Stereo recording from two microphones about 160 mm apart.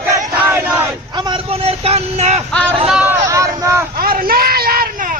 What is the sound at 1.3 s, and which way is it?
Vehicle, 40° right (ahead or behind).